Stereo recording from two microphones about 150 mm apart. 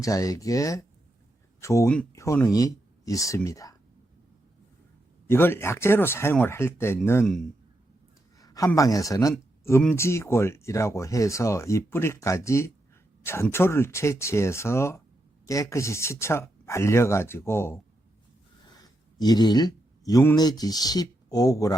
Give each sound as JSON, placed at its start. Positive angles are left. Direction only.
{"t": 0.0, "sound": "speech", "side_deg": 25}
{"t": 5.3, "sound": "speech", "side_deg": 15}
{"t": 8.4, "sound": "speech", "side_deg": 25}
{"t": 18.8, "sound": "a sound", "side_deg": 25}
{"t": 20.3, "sound": "speech", "side_deg": 25}